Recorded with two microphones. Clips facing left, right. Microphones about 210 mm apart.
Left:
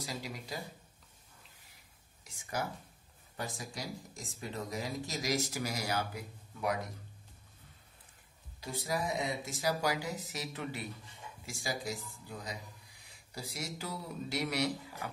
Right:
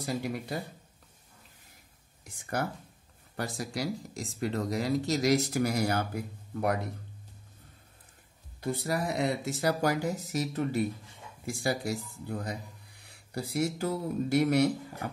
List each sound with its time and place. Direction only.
0.0 s speech: 55° right (ahead or behind)
2.2 s speech: 60° right (ahead or behind)
3.3 s speech: 70° right (ahead or behind); by 6.8 s 55° right (ahead or behind)
8.5 s speech: 60° right (ahead or behind); by 10.9 s 45° right (ahead or behind)
11.4 s speech: 60° right (ahead or behind)